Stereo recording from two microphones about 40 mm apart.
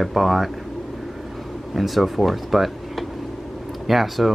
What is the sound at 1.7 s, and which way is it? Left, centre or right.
Speech, centre.